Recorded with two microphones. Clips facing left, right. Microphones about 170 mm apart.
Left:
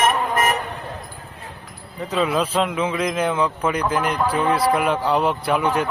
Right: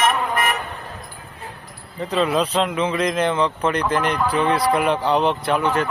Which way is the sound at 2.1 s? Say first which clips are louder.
Right 1 dB; 5° left (ahead or behind).